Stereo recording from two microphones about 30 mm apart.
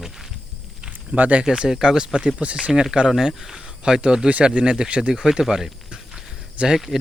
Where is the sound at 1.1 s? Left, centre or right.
Right.